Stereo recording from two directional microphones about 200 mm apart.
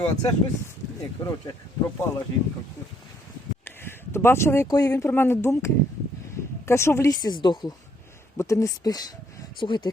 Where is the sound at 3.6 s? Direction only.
10° left (ahead or behind).